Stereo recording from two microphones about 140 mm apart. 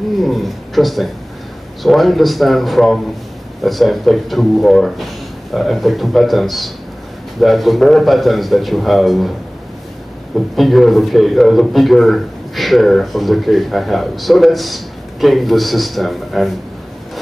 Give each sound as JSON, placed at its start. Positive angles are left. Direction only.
{"t": 0.2, "sound": "a man's voice", "side_deg": 0}
{"t": 10.5, "sound": "a man's voice", "side_deg": 0}